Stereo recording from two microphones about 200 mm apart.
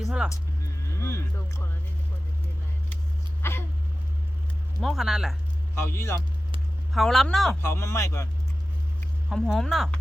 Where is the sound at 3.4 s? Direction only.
10° left (ahead or behind).